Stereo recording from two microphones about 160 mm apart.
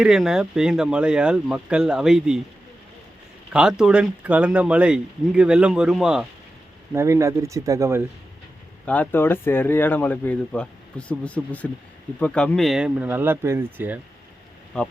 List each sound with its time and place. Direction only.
0.0 s speech: 5° right (ahead or behind)
3.5 s speech: 5° right (ahead or behind)
6.9 s speech: 20° right (ahead or behind)
8.9 s speech: 10° left (ahead or behind); by 14.0 s 10° right (ahead or behind)
14.7 s speech: 5° left (ahead or behind)